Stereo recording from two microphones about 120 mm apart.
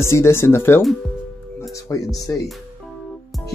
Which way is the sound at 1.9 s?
30° left (ahead or behind).